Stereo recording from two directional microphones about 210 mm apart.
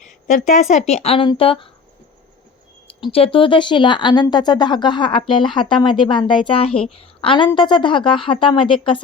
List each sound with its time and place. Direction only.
0.3 s speech: 35° left (ahead or behind)
3.1 s a woman's voice: 25° left (ahead or behind)